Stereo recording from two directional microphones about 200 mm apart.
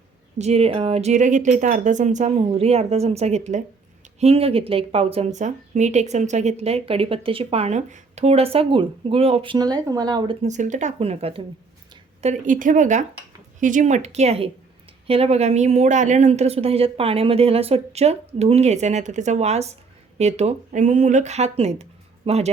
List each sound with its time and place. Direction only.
0.3 s a woman's voice: 30° right (ahead or behind)
10.4 s a woman's voice: 35° right (ahead or behind)